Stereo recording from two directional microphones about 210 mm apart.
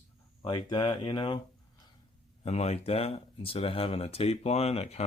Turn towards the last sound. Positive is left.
turn(degrees=30)  # may be behind; listen again after turning